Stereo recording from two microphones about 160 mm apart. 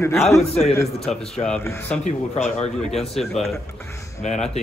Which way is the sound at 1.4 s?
5° left (ahead or behind).